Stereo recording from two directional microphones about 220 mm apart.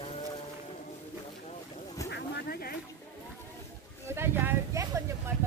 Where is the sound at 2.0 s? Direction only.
50° left (ahead or behind).